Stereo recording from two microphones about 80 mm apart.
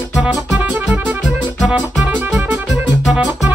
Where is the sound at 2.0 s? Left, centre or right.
Centre.